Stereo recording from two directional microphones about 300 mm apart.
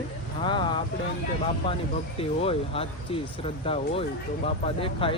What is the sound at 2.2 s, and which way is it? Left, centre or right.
Speech, centre.